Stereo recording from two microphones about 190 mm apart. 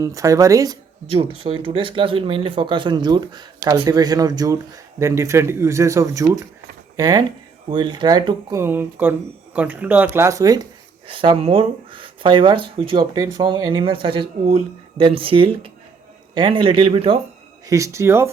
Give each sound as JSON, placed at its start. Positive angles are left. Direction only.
{"t": 0.0, "sound": "speech", "side_deg": -15}
{"t": 17.7, "sound": "speech", "side_deg": -15}